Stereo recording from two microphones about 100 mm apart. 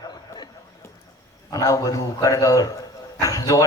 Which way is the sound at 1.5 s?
35° left (ahead or behind).